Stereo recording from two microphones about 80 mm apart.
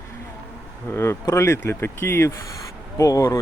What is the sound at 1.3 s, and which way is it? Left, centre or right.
Speech, left.